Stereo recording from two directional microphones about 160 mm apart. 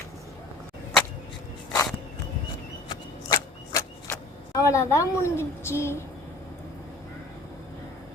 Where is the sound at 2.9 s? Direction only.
25° left (ahead or behind).